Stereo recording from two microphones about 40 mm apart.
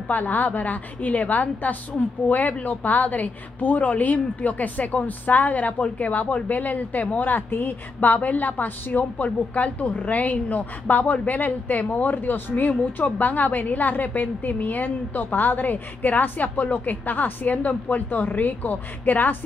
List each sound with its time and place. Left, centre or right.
0.1 s a woman's voice: left